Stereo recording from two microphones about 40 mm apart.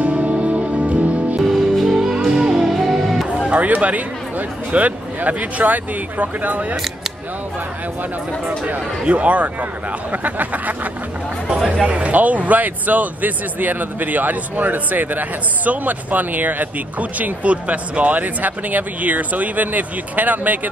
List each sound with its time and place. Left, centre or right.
0.0 s music: right
1.4 s music: centre
3.4 s speech: right
8.5 s speech: right
11.5 s speech: centre
11.8 s speech: right